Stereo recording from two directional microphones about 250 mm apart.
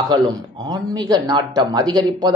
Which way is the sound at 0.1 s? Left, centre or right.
Centre.